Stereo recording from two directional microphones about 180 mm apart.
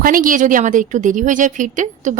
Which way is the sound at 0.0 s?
50° right (ahead or behind).